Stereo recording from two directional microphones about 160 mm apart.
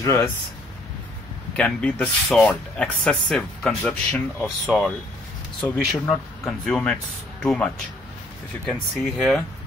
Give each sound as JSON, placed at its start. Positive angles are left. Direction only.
{"t": 0.0, "sound": "speech", "side_deg": 20}
{"t": 1.6, "sound": "speech", "side_deg": 5}
{"t": 8.9, "sound": "speech", "side_deg": 0}